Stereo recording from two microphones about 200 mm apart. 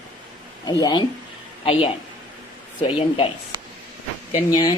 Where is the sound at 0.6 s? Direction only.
20° left (ahead or behind).